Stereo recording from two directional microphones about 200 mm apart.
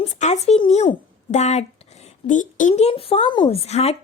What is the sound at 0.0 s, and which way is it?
A woman's voice, 35° left (ahead or behind).